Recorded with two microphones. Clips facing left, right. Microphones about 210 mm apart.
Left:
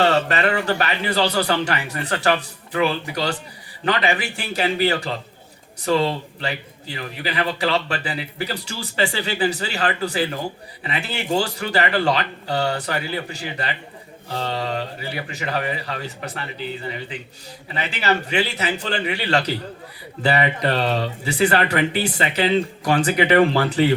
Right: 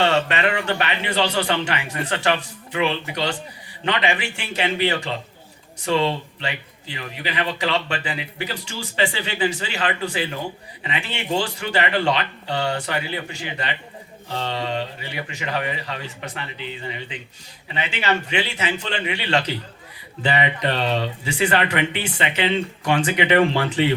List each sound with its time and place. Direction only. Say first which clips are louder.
0.0 s speech: left 1 dB; 35° left (ahead or behind)